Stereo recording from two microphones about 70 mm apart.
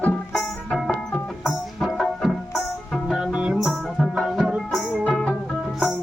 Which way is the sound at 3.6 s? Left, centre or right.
Centre.